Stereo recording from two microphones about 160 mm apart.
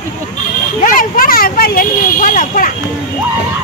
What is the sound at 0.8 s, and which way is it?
Speech, 60° left (ahead or behind).